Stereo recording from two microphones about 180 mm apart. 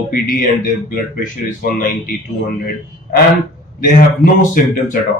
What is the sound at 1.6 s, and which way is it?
Speech, 50° left (ahead or behind).